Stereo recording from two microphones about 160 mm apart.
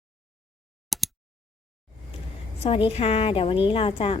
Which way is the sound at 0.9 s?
Centre (ahead or behind).